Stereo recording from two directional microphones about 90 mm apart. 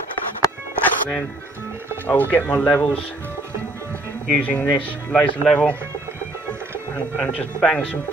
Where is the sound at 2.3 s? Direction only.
20° left (ahead or behind).